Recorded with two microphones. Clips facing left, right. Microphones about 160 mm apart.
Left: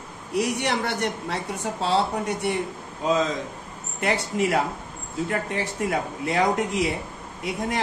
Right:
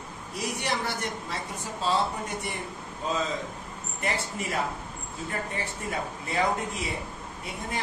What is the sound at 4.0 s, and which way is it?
A woman's voice, 70° left (ahead or behind).